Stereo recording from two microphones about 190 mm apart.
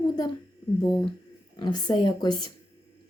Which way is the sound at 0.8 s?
20° left (ahead or behind).